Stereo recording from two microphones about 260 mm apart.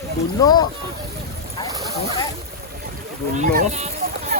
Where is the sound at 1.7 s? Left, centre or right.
Centre.